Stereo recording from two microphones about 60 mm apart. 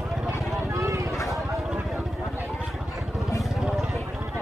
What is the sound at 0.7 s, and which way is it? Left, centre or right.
Vehicle, right.